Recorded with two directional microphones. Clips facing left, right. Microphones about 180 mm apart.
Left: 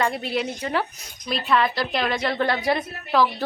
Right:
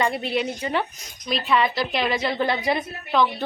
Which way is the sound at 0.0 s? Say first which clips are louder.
Right 1 dB; centre (ahead or behind).